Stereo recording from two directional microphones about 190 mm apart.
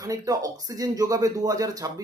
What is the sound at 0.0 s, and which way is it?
Speech, 20° right (ahead or behind).